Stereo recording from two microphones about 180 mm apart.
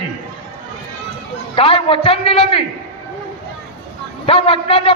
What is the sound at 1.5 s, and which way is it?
A man's voice, 30° left (ahead or behind).